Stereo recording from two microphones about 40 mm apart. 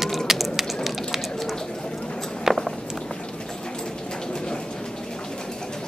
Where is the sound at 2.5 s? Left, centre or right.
Centre.